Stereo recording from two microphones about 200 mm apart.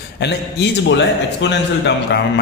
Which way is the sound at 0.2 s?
60° left (ahead or behind).